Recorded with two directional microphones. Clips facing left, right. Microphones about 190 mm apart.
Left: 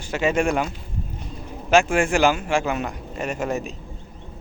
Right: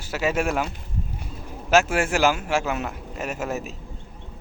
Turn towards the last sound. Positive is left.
turn(degrees=-5)  # may be behind; listen again after turning